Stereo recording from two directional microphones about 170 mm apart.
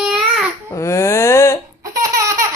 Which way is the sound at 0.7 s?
15° left (ahead or behind).